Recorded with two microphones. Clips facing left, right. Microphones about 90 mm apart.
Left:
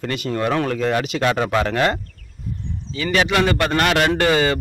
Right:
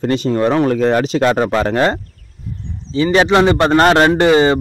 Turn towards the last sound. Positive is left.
turn(degrees=-25)  # may be behind; listen again after turning